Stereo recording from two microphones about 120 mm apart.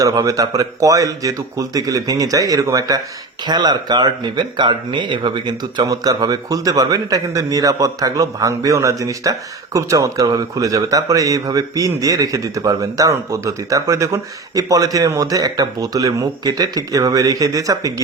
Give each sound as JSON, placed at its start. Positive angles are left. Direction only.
{"t": 0.0, "sound": "speech", "side_deg": -30}